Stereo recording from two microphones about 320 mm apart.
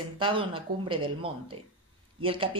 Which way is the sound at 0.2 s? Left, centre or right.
Centre.